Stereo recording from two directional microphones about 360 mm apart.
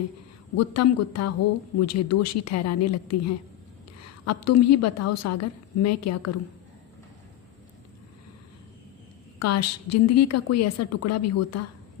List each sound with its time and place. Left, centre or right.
0.5 s a woman's voice: left
9.4 s a woman's voice: left